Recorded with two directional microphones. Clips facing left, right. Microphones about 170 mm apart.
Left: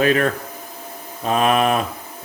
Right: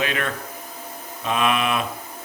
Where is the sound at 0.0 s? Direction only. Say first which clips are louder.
Left 8 dB; 40° left (ahead or behind).